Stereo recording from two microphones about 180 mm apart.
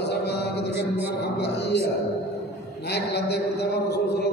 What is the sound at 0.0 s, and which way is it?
Mantra, 65° left (ahead or behind).